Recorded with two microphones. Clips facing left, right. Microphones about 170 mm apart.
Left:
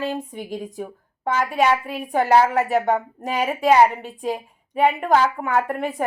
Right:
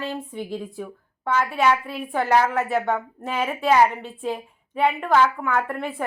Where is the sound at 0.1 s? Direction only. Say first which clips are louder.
Left 1 dB; 20° left (ahead or behind).